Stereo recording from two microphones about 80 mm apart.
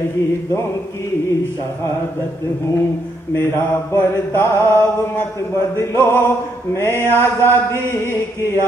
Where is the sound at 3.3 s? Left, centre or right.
Left.